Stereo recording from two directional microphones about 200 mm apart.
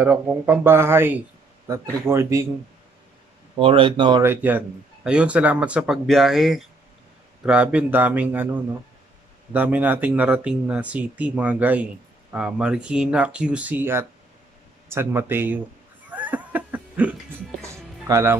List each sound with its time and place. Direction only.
0.0 s speech: 10° right (ahead or behind)
3.5 s speech: 25° right (ahead or behind)
4.2 s a man's voice: 10° right (ahead or behind)
9.5 s speech: 10° right (ahead or behind)
16.1 s a sound: 10° right (ahead or behind)
17.6 s music: 15° right (ahead or behind)